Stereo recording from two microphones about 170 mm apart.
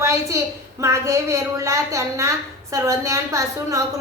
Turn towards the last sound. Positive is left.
turn(degrees=-20)  # may be behind; listen again after turning